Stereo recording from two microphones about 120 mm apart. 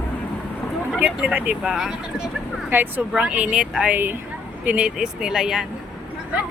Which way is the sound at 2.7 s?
15° right (ahead or behind).